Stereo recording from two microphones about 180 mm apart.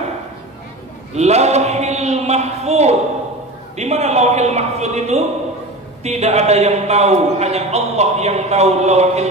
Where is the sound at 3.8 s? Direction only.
40° right (ahead or behind).